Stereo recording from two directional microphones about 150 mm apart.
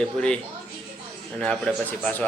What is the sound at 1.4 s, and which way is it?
Speech, 5° left (ahead or behind).